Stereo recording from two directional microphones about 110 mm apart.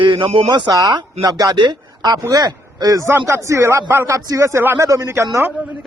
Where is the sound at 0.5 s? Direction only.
35° right (ahead or behind).